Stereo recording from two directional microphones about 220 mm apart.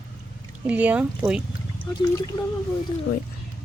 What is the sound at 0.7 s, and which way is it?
Speech, 5° right (ahead or behind).